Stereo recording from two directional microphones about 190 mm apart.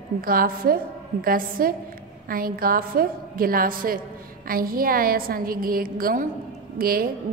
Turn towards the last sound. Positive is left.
turn(degrees=-50)  # may be behind; listen again after turning